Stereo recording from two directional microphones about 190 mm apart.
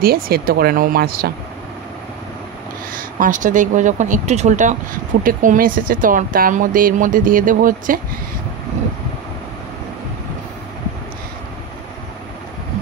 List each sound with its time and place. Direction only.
0.0 s speech: 50° right (ahead or behind)
3.0 s speech: 45° right (ahead or behind)